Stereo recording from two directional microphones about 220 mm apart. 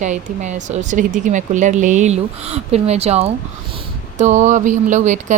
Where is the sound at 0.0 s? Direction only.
35° right (ahead or behind).